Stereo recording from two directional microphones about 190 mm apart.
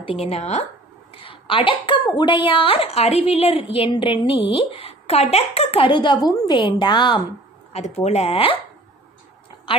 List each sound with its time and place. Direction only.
0.0 s a woman's voice: 30° left (ahead or behind)
7.7 s speech: 35° left (ahead or behind)